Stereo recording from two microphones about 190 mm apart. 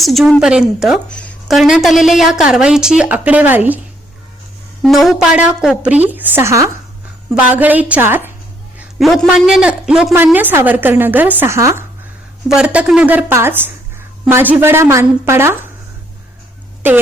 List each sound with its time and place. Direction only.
0.0 s a woman's voice: centre (ahead or behind)
4.8 s a woman's voice: centre (ahead or behind)
8.8 s a man's voice: centre (ahead or behind)
16.8 s a woman's voice: 10° right (ahead or behind)